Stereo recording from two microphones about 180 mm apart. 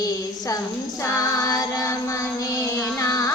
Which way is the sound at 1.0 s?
15° left (ahead or behind).